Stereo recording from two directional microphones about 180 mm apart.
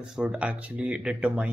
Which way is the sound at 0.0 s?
5° right (ahead or behind).